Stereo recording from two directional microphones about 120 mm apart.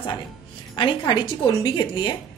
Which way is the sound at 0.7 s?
40° left (ahead or behind).